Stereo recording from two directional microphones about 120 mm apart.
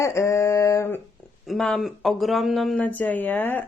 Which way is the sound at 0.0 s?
25° left (ahead or behind).